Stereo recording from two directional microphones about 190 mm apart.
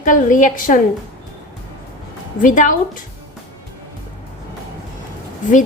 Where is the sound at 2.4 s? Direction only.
45° left (ahead or behind).